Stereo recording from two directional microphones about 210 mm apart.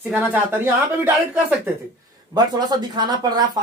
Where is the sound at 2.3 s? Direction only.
20° right (ahead or behind).